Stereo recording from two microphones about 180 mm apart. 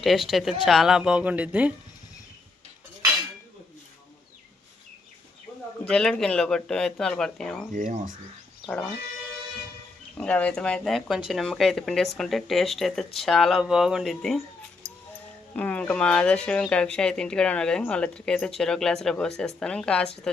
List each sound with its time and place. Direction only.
0.0 s speech: centre (ahead or behind)
5.9 s speech: 5° left (ahead or behind)
7.7 s speech: 45° right (ahead or behind)
8.6 s speech: 5° left (ahead or behind)
10.2 s speech: 10° left (ahead or behind)
15.5 s speech: 10° left (ahead or behind)